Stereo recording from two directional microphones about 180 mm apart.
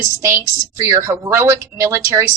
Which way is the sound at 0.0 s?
15° right (ahead or behind).